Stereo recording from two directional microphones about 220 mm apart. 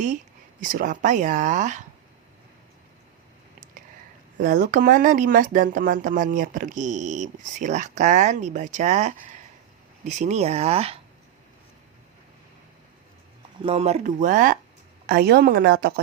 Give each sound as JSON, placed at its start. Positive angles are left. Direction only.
{"t": 0.6, "sound": "speech", "side_deg": -35}
{"t": 4.4, "sound": "speech", "side_deg": -40}
{"t": 13.6, "sound": "a woman's voice", "side_deg": -25}